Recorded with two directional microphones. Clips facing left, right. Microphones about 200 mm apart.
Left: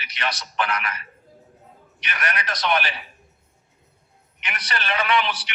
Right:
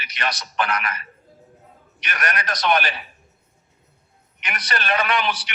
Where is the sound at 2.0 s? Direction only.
45° right (ahead or behind).